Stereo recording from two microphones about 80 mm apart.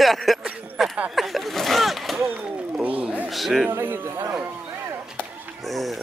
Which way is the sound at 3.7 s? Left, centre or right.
Right.